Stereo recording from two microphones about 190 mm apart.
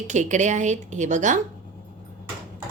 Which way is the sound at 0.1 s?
40° right (ahead or behind).